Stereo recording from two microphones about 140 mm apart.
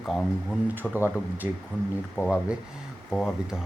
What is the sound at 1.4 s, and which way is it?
Speech, 15° right (ahead or behind).